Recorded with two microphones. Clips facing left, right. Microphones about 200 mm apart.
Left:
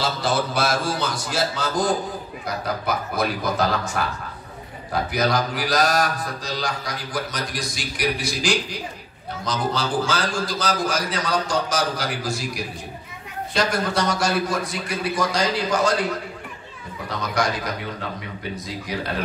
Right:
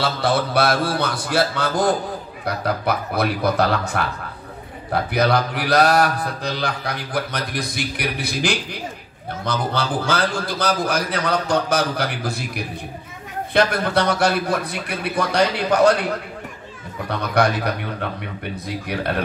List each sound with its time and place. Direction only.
0.0 s mantra: 60° right (ahead or behind)
5.1 s mantra: 60° right (ahead or behind)
17.1 s mantra: 60° right (ahead or behind)